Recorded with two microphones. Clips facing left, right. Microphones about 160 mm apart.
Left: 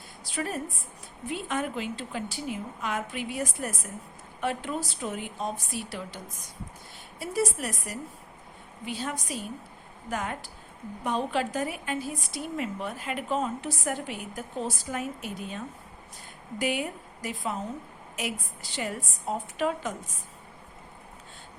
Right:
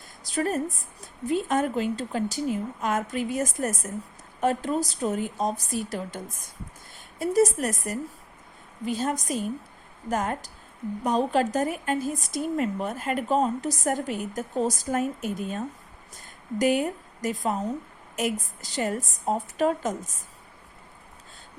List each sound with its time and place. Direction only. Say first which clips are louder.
0.3 s a woman's voice: right 6 dB; 40° right (ahead or behind)